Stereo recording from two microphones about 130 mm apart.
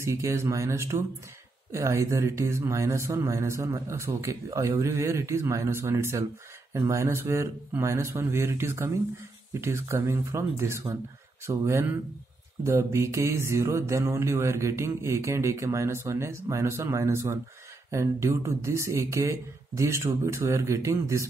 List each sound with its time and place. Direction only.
0.0 s speech: 20° right (ahead or behind)